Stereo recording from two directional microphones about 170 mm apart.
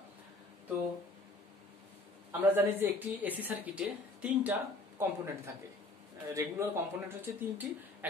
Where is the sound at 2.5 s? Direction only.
10° right (ahead or behind).